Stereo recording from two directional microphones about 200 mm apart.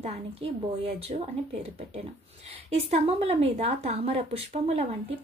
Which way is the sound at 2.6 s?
30° right (ahead or behind).